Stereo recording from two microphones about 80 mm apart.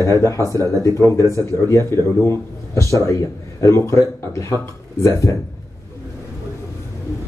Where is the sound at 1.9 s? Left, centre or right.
Left.